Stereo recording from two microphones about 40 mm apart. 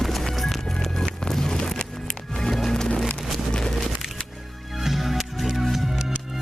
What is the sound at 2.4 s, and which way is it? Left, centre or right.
Music, centre.